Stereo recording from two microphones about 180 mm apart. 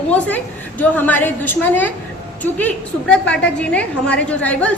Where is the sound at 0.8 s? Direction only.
10° left (ahead or behind).